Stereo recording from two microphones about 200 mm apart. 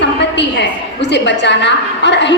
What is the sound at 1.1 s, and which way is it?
A woman's voice, 60° left (ahead or behind).